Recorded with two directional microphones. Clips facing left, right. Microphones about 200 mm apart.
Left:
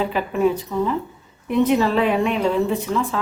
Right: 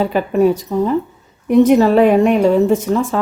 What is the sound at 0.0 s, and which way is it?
Speech, 45° right (ahead or behind).